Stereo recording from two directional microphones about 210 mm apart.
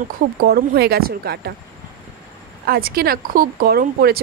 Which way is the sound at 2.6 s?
45° right (ahead or behind).